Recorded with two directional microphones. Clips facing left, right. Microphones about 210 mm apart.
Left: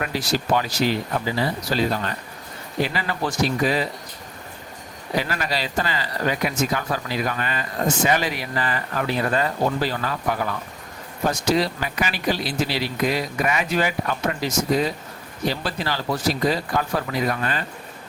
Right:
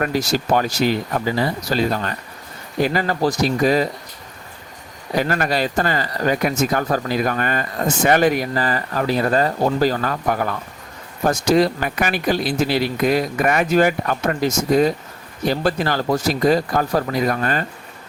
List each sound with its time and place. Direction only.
0.0 s speech: 45° right (ahead or behind)
5.1 s speech: 50° right (ahead or behind)